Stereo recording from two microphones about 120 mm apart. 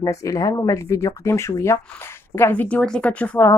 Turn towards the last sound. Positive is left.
turn(degrees=10)  # may be behind; listen again after turning